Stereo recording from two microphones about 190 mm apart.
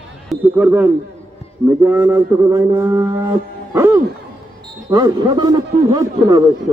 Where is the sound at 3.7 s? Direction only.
15° right (ahead or behind).